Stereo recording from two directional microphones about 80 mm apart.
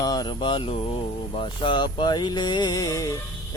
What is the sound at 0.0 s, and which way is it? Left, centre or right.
Speech, left.